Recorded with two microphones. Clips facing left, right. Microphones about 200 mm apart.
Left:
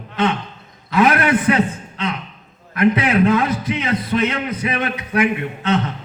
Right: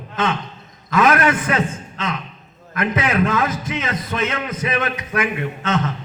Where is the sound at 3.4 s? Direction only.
45° right (ahead or behind).